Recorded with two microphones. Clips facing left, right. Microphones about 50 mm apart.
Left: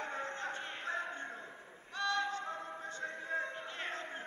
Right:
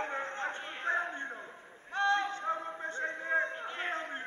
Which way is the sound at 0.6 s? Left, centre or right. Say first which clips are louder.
Right 2 dB; centre.